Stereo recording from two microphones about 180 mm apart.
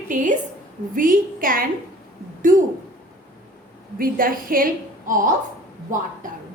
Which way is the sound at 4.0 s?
50° right (ahead or behind).